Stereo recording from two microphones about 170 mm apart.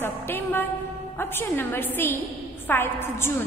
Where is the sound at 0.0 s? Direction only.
15° left (ahead or behind).